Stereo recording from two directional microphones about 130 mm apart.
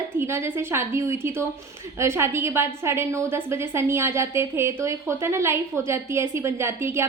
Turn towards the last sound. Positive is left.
turn(degrees=-20)  # may be behind; listen again after turning